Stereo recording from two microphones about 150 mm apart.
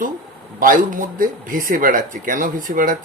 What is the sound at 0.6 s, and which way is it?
Speech, 65° right (ahead or behind).